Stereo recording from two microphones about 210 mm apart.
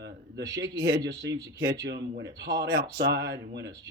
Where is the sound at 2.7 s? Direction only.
55° right (ahead or behind).